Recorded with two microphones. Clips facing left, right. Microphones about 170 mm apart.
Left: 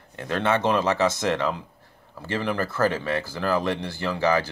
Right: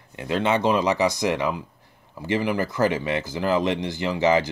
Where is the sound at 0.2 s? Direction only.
15° right (ahead or behind).